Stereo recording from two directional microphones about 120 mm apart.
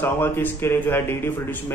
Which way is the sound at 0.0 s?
15° left (ahead or behind).